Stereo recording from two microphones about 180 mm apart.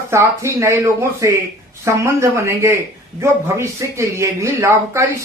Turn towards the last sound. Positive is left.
turn(degrees=-15)  # may be behind; listen again after turning